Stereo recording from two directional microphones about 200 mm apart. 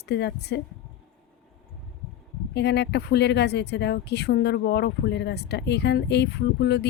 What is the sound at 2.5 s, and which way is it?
Speech, 60° left (ahead or behind).